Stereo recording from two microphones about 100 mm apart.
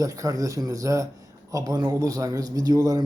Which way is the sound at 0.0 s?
35° right (ahead or behind).